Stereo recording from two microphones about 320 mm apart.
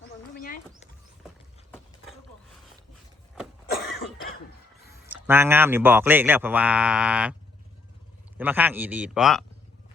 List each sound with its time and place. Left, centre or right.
0.3 s a sound: left
5.1 s speech: centre
8.4 s speech: centre